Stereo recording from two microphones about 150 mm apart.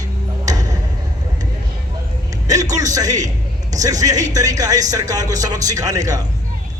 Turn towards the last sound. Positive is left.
turn(degrees=-25)  # may be behind; listen again after turning